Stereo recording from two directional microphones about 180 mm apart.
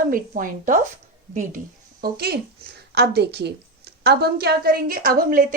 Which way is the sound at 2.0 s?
60° right (ahead or behind).